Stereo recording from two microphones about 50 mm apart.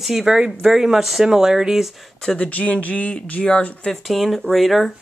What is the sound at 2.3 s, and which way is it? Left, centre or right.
Speech, left.